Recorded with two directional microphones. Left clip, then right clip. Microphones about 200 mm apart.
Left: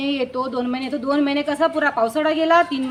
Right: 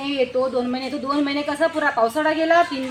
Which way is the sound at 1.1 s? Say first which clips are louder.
Left 3 dB; 30° left (ahead or behind).